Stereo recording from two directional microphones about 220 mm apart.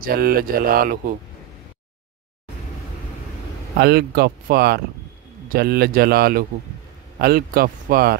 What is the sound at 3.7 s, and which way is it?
Speech, 45° right (ahead or behind).